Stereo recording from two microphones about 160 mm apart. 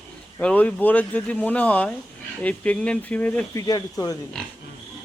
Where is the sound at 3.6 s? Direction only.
20° left (ahead or behind).